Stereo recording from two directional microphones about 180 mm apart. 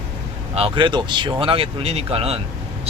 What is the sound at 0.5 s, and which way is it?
Speech, 30° right (ahead or behind).